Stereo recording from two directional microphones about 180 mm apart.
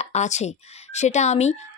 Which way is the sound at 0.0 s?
40° left (ahead or behind).